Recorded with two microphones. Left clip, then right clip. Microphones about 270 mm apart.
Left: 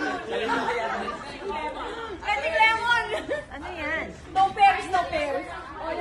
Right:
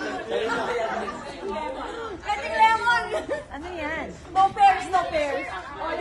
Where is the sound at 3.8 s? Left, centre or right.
Right.